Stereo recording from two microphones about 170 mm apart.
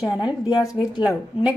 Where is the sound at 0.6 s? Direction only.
25° left (ahead or behind).